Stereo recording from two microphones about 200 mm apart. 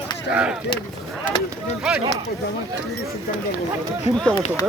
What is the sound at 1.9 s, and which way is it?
Speech, 5° right (ahead or behind).